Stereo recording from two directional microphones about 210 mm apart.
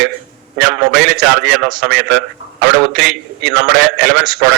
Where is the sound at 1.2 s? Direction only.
5° right (ahead or behind).